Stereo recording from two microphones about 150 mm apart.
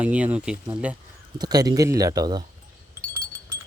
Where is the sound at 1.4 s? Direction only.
25° right (ahead or behind).